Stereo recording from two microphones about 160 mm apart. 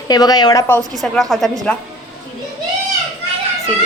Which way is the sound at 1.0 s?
Centre (ahead or behind).